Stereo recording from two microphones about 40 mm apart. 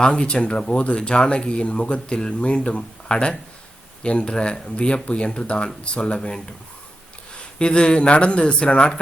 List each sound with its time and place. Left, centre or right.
0.0 s speech: left
7.6 s speech: left